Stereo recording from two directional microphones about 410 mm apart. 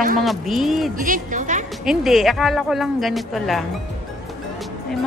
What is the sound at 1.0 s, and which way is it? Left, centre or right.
Speech, centre.